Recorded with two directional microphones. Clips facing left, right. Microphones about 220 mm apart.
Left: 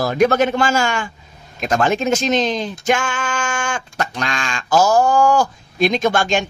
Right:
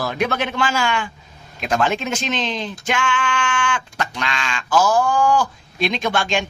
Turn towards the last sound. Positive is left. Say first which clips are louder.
# left 4 dB
turn(degrees=45)  # may be behind; listen again after turning